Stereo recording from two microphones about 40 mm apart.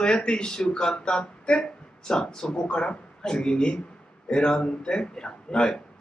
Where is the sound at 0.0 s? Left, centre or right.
Left.